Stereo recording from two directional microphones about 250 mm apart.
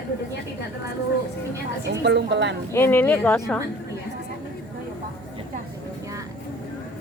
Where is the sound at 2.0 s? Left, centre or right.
Right.